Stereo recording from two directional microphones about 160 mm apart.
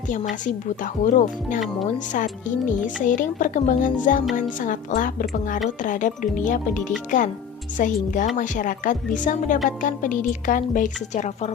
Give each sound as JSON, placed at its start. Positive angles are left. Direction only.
{"t": 0.1, "sound": "a woman's voice", "side_deg": 50}